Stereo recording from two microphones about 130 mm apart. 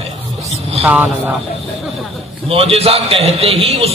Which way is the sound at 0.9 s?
15° right (ahead or behind).